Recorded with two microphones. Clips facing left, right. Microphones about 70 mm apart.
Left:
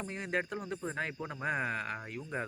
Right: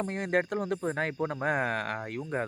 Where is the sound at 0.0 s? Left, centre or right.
Right.